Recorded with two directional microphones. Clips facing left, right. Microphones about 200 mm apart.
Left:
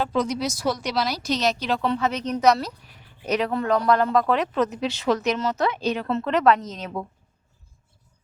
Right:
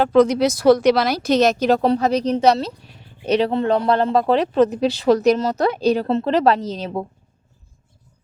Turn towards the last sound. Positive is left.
turn(degrees=-30)  # may be behind; listen again after turning